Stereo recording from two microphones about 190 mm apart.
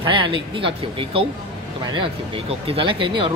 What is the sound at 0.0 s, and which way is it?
Speech, 25° right (ahead or behind).